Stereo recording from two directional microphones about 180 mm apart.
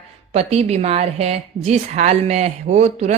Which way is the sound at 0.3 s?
35° right (ahead or behind).